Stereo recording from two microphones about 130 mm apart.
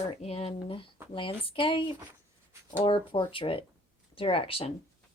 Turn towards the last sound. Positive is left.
turn(degrees=45)  # may be behind; listen again after turning